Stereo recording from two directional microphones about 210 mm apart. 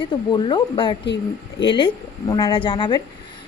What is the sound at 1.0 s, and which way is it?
Speech, 55° left (ahead or behind).